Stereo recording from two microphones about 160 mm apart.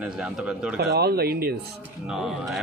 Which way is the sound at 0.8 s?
80° right.